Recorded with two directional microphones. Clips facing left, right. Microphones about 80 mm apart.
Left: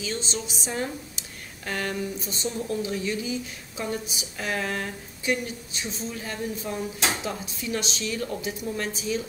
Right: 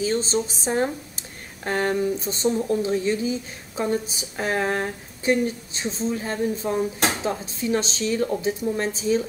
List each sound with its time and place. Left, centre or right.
0.0 s speech: right